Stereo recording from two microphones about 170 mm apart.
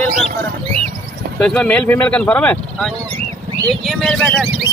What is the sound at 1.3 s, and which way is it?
Speech, 5° left (ahead or behind).